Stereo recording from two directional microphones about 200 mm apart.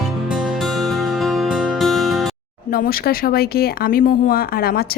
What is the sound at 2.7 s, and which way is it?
Speech, 50° left (ahead or behind).